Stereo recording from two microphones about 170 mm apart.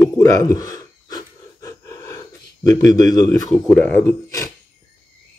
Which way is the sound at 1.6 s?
20° left (ahead or behind).